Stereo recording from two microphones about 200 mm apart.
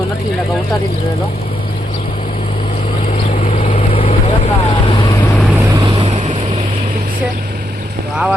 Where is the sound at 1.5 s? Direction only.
25° left (ahead or behind).